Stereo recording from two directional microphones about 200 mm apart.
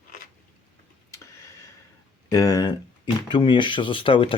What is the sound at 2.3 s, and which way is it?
Speech, 20° left (ahead or behind).